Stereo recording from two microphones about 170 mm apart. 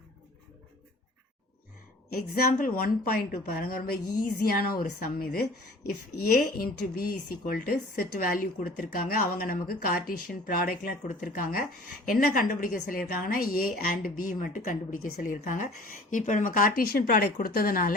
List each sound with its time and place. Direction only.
2.3 s speech: 55° left (ahead or behind)